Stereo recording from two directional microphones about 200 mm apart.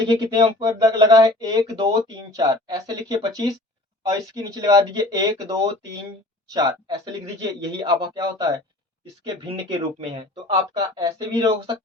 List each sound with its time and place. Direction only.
0.1 s speech: 20° right (ahead or behind)
10.8 s speech: 15° right (ahead or behind)